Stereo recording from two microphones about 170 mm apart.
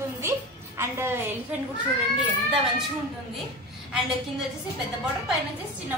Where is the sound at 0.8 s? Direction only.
15° right (ahead or behind).